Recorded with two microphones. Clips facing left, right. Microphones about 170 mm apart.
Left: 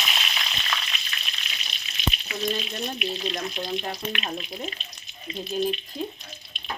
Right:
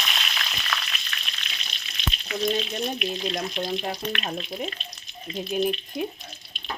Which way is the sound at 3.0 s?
Centre (ahead or behind).